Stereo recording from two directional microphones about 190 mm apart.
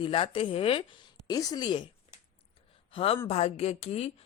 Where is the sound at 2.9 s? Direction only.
30° left (ahead or behind).